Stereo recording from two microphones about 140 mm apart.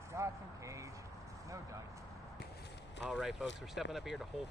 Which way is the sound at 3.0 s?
Centre (ahead or behind).